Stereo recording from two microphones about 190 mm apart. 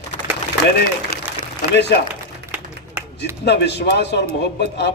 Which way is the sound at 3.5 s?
65° left (ahead or behind).